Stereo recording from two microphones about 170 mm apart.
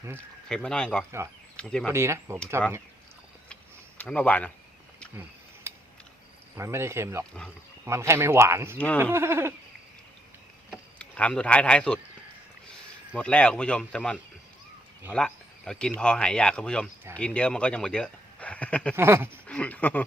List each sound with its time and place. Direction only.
0.4 s speech: 5° left (ahead or behind)
1.9 s speech: 15° right (ahead or behind)
3.5 s tick-tock: 5° left (ahead or behind)
5.7 s mechanisms: 15° right (ahead or behind)
6.6 s speech: 15° right (ahead or behind)
10.7 s a sound: 5° left (ahead or behind)
13.1 s speech: 5° left (ahead or behind)
18.9 s speech: 15° right (ahead or behind)
19.5 s speech: 10° left (ahead or behind)